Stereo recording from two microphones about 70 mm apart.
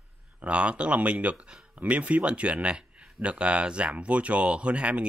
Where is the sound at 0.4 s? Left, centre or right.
Centre.